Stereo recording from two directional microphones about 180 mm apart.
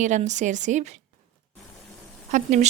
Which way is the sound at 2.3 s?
40° right (ahead or behind).